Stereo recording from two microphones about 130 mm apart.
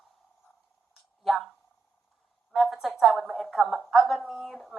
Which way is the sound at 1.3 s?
Centre (ahead or behind).